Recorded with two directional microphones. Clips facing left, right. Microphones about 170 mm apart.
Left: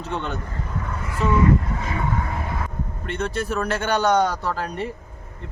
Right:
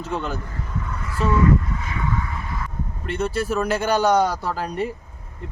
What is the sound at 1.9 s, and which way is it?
Vehicle, 45° left (ahead or behind).